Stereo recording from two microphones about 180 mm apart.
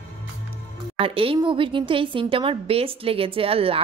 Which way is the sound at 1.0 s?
30° right (ahead or behind).